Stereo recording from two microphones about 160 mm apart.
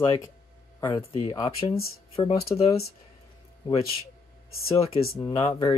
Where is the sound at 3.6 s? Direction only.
30° left (ahead or behind).